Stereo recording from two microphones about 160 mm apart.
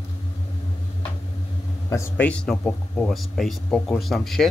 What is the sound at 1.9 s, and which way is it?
Speech, 15° left (ahead or behind).